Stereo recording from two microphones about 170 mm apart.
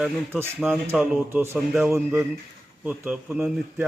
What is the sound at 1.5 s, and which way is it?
A man's voice, centre (ahead or behind).